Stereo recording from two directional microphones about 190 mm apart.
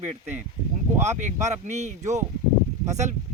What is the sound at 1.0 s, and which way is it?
Speech, 40° right (ahead or behind).